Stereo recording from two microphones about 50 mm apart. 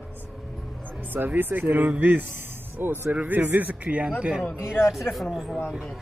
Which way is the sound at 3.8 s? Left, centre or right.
Right.